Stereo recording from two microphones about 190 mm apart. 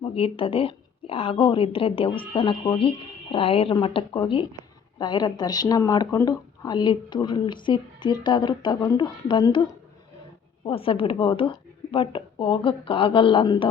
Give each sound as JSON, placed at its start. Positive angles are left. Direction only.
{"t": 0.0, "sound": "speech", "side_deg": 30}
{"t": 10.7, "sound": "speech", "side_deg": 30}